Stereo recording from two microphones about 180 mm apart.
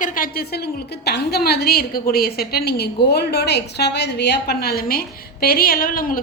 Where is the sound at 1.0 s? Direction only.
65° left (ahead or behind).